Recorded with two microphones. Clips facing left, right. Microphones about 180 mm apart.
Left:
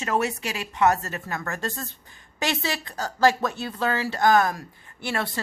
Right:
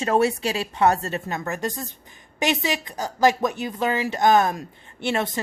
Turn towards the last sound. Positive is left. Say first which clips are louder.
# right 4 dB
turn(degrees=-20)  # may be behind; listen again after turning